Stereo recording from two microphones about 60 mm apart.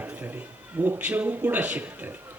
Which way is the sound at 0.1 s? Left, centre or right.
Right.